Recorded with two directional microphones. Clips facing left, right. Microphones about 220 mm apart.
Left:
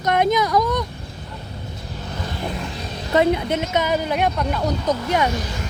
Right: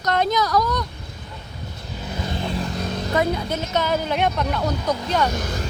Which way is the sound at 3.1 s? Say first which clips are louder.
Left 5 dB; 25° left (ahead or behind).